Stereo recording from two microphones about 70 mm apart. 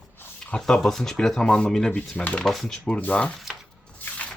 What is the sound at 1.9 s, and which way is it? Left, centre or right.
Speech, left.